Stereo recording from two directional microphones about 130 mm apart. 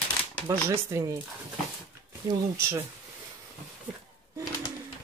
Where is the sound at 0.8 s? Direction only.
25° right (ahead or behind).